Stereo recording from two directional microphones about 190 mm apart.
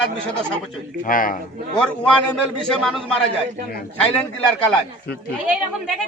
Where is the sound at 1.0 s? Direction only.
45° left (ahead or behind).